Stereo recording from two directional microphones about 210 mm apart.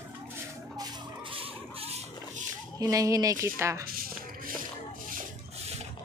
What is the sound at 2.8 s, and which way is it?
Speech, 15° right (ahead or behind).